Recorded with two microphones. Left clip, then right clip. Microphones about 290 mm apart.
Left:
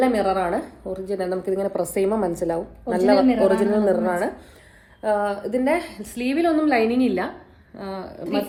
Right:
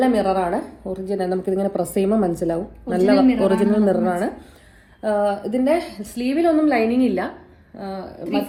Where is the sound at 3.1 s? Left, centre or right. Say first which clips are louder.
Left 1 dB; left.